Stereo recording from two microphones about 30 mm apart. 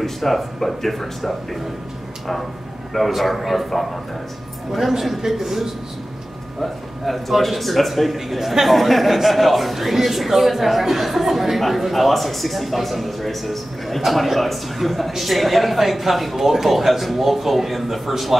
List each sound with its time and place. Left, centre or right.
0.0 s speech: centre
3.2 s a man's voice: centre